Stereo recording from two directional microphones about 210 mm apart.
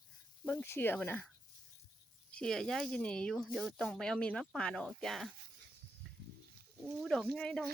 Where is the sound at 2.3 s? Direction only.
5° left (ahead or behind).